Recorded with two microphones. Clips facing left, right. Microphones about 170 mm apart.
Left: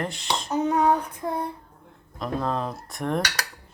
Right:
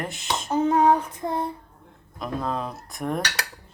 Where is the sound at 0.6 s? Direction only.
30° right (ahead or behind).